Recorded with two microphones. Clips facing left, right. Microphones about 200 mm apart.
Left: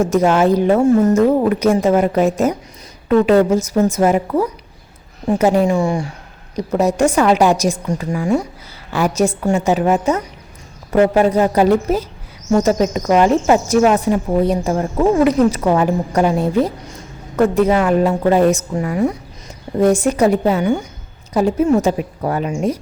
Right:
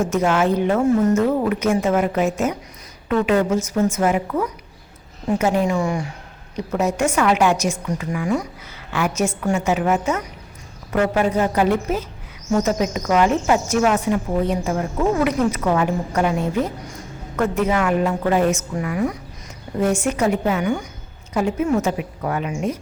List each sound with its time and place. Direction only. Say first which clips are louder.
0.1 s speech: left 5 dB; 35° left (ahead or behind)